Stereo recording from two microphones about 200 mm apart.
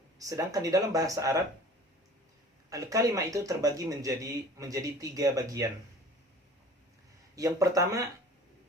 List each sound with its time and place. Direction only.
0.2 s speech: 15° right (ahead or behind)
2.6 s speech: 15° right (ahead or behind)
7.3 s speech: 15° right (ahead or behind)